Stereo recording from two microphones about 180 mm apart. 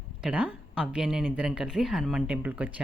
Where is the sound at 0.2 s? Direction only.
5° right (ahead or behind).